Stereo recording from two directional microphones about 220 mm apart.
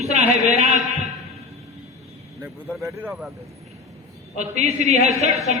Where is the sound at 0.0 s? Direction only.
30° right (ahead or behind).